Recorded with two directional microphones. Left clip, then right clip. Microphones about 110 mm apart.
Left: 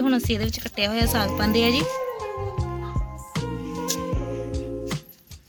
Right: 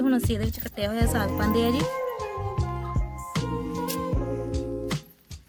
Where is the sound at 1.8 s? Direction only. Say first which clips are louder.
Left 1 dB; centre (ahead or behind).